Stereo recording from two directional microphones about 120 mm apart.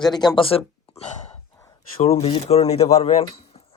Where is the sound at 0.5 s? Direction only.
65° left (ahead or behind).